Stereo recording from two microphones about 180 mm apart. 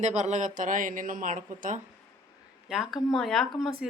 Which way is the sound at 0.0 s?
40° right (ahead or behind).